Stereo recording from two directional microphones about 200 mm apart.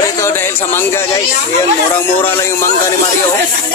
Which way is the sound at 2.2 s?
10° left (ahead or behind).